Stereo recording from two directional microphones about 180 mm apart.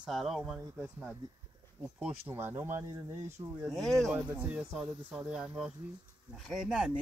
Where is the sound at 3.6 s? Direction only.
Centre (ahead or behind).